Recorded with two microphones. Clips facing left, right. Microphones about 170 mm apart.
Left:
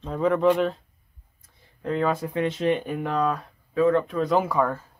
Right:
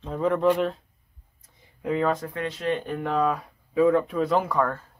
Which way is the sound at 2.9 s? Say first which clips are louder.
Even; centre (ahead or behind).